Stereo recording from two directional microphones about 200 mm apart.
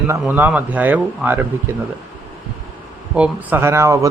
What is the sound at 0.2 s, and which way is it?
Speech, 10° right (ahead or behind).